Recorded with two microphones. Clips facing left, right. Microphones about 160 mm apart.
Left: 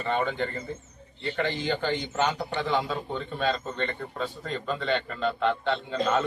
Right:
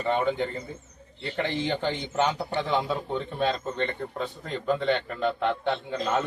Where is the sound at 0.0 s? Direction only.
15° right (ahead or behind).